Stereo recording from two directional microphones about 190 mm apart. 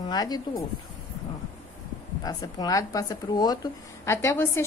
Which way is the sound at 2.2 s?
20° left (ahead or behind).